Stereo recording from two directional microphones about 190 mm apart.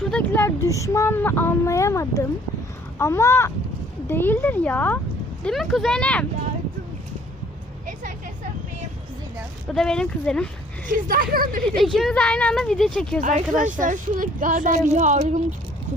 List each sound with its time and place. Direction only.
0.0 s speech: 5° left (ahead or behind)
9.7 s speech: 5° left (ahead or behind)
10.8 s speech: 45° right (ahead or behind)
11.8 s speech: centre (ahead or behind)
13.2 s speech: 45° right (ahead or behind)